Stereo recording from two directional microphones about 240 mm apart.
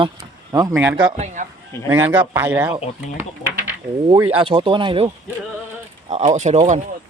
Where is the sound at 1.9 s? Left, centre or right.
Centre.